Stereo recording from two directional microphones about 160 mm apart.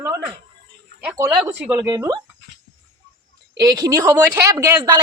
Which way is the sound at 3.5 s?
25° right (ahead or behind).